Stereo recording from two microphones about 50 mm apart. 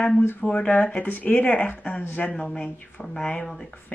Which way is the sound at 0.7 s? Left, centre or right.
Left.